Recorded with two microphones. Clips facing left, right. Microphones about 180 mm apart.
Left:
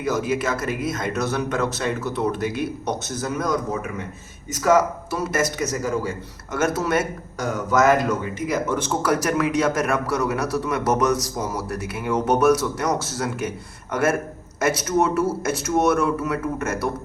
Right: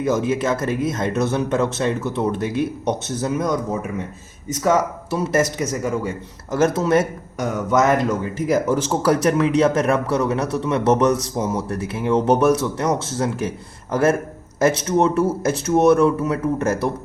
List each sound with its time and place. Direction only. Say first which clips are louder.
0.0 s a man's voice: right 3 dB; 25° right (ahead or behind)
5.1 s a man's voice: right 4 dB; 30° right (ahead or behind)
14.6 s speech: right 3 dB; 30° right (ahead or behind)